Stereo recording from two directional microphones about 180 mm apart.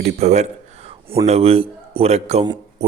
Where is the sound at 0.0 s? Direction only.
40° right (ahead or behind).